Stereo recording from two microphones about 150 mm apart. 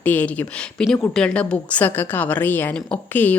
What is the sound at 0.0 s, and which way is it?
A woman's voice, 10° left (ahead or behind).